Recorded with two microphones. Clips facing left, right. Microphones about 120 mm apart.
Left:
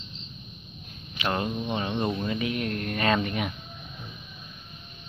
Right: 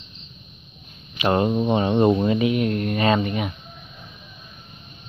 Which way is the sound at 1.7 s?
40° right (ahead or behind).